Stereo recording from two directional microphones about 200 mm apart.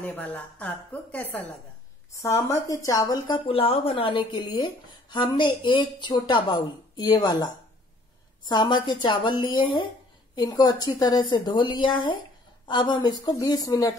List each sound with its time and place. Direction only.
0.0 s a woman's voice: 10° left (ahead or behind)